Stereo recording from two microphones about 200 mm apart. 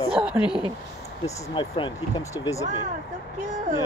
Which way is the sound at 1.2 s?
25° left (ahead or behind).